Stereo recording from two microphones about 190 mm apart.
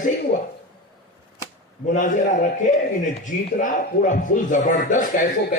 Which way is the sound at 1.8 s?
40° left (ahead or behind).